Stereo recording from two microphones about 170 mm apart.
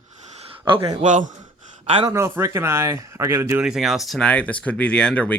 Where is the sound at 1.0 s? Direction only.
45° right (ahead or behind).